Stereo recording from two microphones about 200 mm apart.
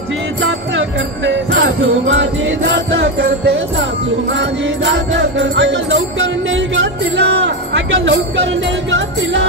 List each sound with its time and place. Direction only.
0.4 s music: 70° right (ahead or behind)